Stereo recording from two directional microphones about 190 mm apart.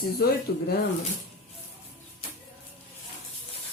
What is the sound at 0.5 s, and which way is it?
Speech, 55° left (ahead or behind).